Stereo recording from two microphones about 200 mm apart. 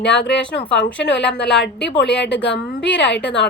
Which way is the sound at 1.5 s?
60° left (ahead or behind).